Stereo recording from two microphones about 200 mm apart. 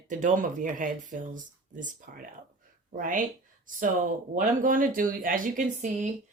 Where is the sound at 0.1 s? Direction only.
40° right (ahead or behind).